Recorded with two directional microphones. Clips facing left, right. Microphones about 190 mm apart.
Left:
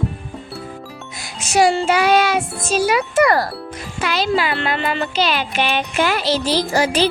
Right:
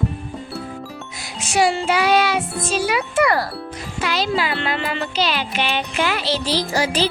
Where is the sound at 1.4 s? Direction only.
40° left (ahead or behind).